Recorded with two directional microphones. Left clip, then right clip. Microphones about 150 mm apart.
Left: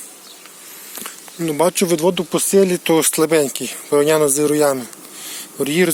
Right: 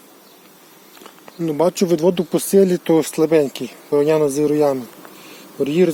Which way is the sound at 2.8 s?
15° right (ahead or behind).